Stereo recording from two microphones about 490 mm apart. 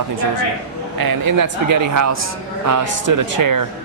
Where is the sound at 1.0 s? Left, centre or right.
Right.